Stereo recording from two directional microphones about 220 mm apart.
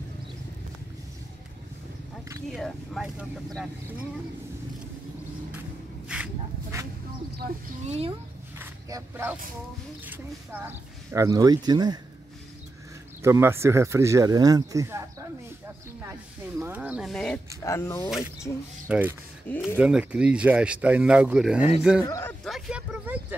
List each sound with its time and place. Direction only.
2.4 s speech: centre (ahead or behind)
6.0 s a sound: 5° right (ahead or behind)
7.8 s speech: 30° right (ahead or behind)
8.5 s a sound: 10° right (ahead or behind)
10.0 s speech: 10° right (ahead or behind)
13.2 s speech: 10° right (ahead or behind); by 18.0 s 10° left (ahead or behind)
18.9 s speech: 10° right (ahead or behind)
19.5 s speech: 10° left (ahead or behind)
19.8 s speech: 5° right (ahead or behind)
22.0 s speech: 15° left (ahead or behind)
22.4 s a sound: centre (ahead or behind)